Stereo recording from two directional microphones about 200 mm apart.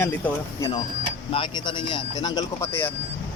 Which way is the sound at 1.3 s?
25° left (ahead or behind).